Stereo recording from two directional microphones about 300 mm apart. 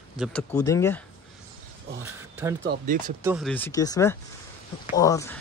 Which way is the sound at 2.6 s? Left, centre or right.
Right.